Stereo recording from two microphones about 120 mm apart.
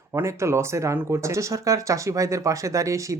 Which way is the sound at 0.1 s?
25° right (ahead or behind).